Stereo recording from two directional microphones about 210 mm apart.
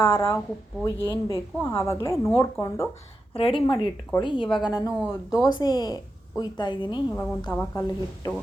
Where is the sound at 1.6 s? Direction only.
15° left (ahead or behind).